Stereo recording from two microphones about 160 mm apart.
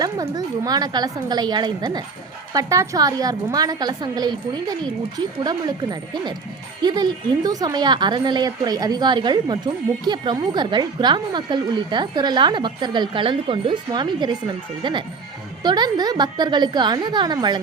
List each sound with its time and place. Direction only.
0.0 s a woman's voice: 25° right (ahead or behind)